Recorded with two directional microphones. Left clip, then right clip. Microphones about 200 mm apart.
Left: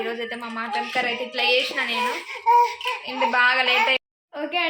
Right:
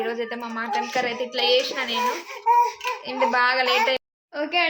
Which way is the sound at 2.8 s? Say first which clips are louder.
Even; 25° right (ahead or behind).